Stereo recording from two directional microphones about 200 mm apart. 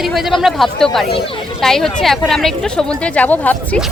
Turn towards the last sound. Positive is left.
turn(degrees=5)  # may be behind; listen again after turning